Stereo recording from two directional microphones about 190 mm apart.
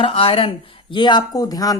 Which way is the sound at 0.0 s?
30° left (ahead or behind).